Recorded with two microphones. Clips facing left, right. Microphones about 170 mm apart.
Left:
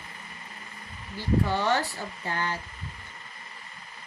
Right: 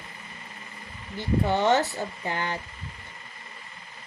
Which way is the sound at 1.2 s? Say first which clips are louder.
Right 2 dB; 20° right (ahead or behind).